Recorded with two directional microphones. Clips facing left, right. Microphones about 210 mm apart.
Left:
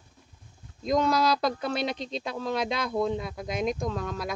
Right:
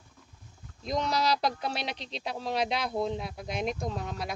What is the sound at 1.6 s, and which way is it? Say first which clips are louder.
Speech: left 5 dB; 50° left (ahead or behind).